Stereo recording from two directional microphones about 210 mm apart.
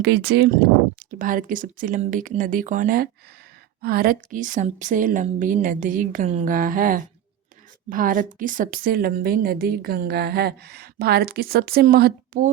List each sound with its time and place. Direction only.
0.0 s a woman's voice: 50° right (ahead or behind)